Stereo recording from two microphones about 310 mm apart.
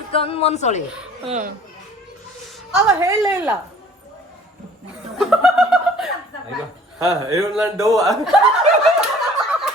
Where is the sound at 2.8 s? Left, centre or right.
Centre.